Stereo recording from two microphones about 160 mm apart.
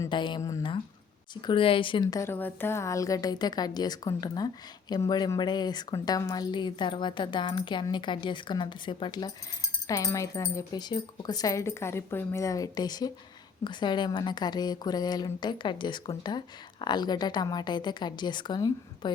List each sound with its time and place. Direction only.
0.1 s a woman's voice: 30° left (ahead or behind)